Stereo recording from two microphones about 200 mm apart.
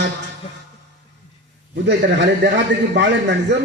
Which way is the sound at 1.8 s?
60° right (ahead or behind).